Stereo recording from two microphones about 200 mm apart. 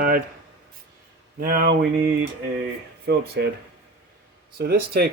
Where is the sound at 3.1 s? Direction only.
55° right (ahead or behind).